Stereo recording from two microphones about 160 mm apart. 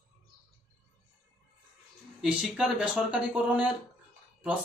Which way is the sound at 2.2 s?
5° right (ahead or behind).